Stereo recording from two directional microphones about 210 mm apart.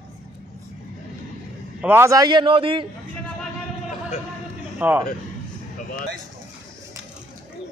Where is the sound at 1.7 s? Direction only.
10° right (ahead or behind).